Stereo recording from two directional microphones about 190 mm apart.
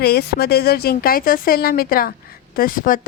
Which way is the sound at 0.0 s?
55° left (ahead or behind).